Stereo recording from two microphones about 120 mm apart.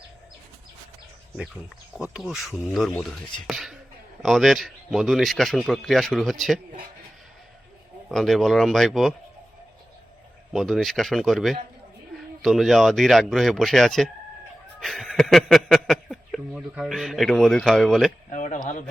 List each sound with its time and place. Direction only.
2.0 s speech: 5° right (ahead or behind)
8.1 s speech: centre (ahead or behind)
10.5 s speech: centre (ahead or behind)
14.8 s a sound: centre (ahead or behind)
16.5 s speech: centre (ahead or behind)
18.3 s speech: 90° left